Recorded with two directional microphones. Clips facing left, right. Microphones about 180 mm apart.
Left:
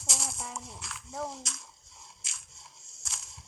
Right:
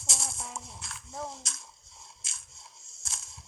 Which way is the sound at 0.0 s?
25° right (ahead or behind).